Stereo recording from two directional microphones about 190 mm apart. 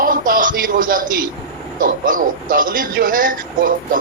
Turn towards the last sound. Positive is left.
turn(degrees=-45)  # may be behind; listen again after turning